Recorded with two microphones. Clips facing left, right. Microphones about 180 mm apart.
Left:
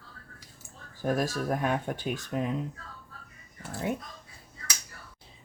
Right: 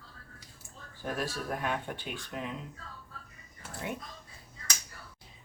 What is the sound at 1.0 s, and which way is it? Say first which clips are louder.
Speech: left 7 dB; 40° left (ahead or behind).